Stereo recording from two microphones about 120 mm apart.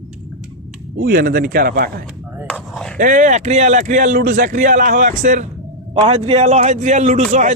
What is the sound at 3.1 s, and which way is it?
A man's voice, 90° right.